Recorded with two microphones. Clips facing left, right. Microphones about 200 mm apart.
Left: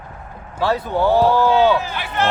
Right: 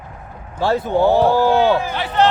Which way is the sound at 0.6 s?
25° right (ahead or behind).